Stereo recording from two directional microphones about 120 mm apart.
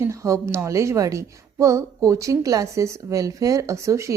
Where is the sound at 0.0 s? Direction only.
25° right (ahead or behind).